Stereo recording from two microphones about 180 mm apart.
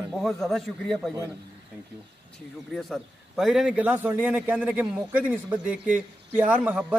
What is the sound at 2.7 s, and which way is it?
A man's voice, centre (ahead or behind).